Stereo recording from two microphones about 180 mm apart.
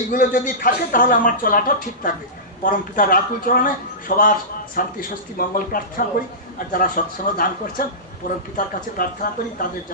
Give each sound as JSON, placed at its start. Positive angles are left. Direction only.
{"t": 0.1, "sound": "speech", "side_deg": 50}